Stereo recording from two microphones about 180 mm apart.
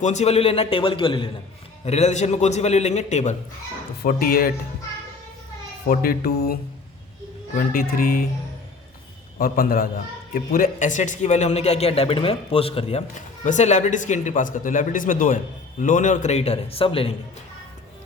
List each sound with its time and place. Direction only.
0.0 s speech: 40° left (ahead or behind)
1.8 s speech: 40° left (ahead or behind)
4.0 s speech: 55° left (ahead or behind)
5.9 s speech: 55° left (ahead or behind)
9.4 s speech: 55° left (ahead or behind); by 17.2 s 30° left (ahead or behind)